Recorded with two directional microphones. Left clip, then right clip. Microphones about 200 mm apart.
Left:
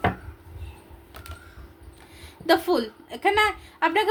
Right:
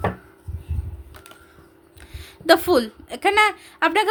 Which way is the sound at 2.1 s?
50° right (ahead or behind).